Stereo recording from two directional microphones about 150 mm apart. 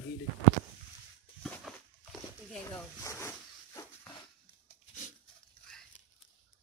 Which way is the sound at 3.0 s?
20° left (ahead or behind).